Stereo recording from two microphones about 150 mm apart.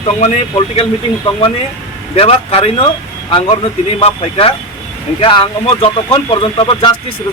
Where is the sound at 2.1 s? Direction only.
40° left (ahead or behind).